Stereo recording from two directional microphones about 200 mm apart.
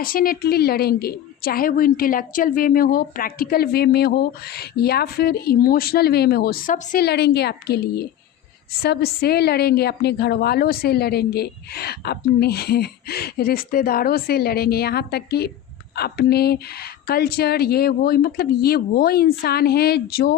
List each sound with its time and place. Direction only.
0.0 s a woman's voice: 45° left (ahead or behind)